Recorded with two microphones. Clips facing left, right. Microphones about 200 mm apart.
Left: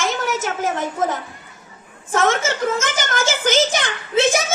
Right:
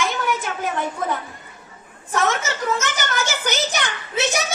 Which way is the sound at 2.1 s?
50° left (ahead or behind).